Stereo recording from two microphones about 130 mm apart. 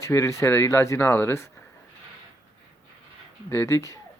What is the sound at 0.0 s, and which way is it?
Speech, 20° left (ahead or behind).